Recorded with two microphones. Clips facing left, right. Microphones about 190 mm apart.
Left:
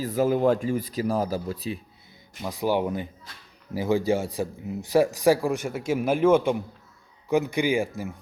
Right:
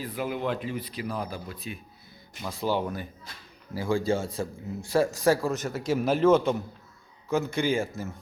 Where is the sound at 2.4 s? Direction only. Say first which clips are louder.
Left 3 dB; 15° left (ahead or behind).